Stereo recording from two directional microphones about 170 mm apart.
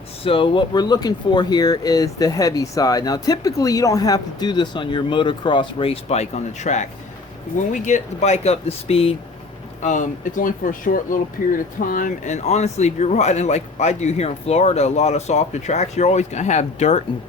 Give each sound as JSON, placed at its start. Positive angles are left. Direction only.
{"t": 0.3, "sound": "speech", "side_deg": 30}
{"t": 9.8, "sound": "speech", "side_deg": 50}